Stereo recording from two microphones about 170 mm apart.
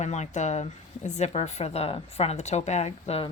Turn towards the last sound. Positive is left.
turn(degrees=35)  # may be behind; listen again after turning